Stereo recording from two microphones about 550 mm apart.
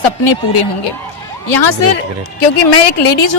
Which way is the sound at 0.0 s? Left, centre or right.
Left.